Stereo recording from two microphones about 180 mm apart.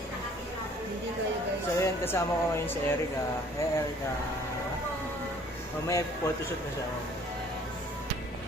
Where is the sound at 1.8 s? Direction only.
15° left (ahead or behind).